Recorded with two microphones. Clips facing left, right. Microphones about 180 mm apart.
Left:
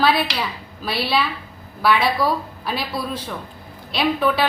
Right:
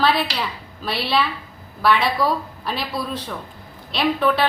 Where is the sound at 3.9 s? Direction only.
5° left (ahead or behind).